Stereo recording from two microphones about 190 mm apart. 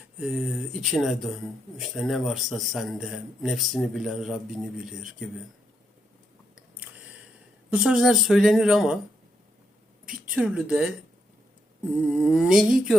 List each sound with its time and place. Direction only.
0.2 s speech: 5° right (ahead or behind)
7.7 s speech: 5° right (ahead or behind)
10.3 s speech: 5° right (ahead or behind)
12.1 s speech: 5° right (ahead or behind)